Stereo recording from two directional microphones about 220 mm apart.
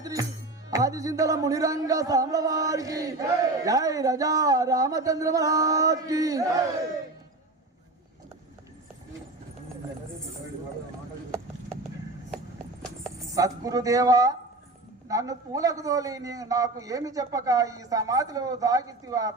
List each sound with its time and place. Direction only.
0.0 s music: 15° right (ahead or behind)
0.7 s a man's voice: 15° right (ahead or behind)
13.3 s a man's voice: 15° right (ahead or behind)